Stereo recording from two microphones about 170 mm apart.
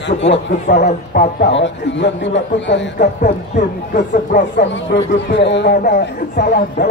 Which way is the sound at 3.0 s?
50° left (ahead or behind).